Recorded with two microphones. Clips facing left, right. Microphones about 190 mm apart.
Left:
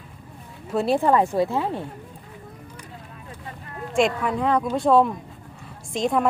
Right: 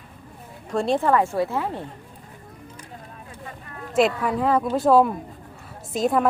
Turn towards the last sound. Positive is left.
turn(degrees=-5)  # may be behind; listen again after turning